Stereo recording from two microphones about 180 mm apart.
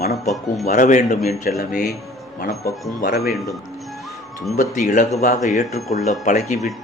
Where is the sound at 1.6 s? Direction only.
55° left (ahead or behind).